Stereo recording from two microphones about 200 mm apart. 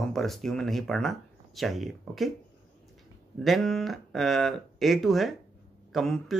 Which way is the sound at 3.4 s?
Centre (ahead or behind).